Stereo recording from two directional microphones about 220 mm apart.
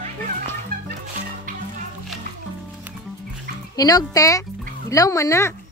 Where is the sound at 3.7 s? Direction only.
15° left (ahead or behind).